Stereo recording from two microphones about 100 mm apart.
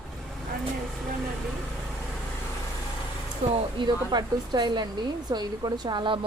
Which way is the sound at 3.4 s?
90° right.